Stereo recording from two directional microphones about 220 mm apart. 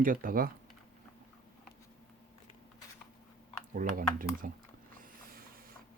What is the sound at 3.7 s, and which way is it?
Speech, 40° right (ahead or behind).